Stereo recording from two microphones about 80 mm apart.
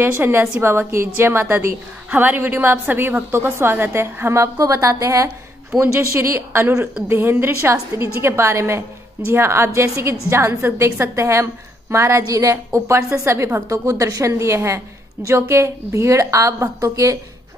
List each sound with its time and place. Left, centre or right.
0.0 s a woman's voice: right
4.6 s a woman's voice: right